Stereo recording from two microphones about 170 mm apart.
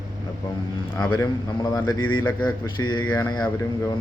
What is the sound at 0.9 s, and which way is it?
Speech, 25° left (ahead or behind).